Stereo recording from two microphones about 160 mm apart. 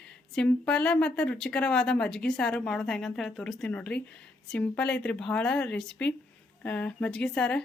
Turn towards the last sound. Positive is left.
turn(degrees=5)  # may be behind; listen again after turning